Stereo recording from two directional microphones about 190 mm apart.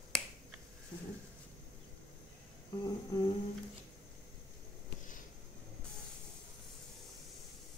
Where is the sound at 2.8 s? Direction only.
20° left (ahead or behind).